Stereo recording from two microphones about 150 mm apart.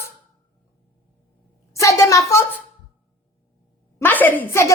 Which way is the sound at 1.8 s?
20° left (ahead or behind).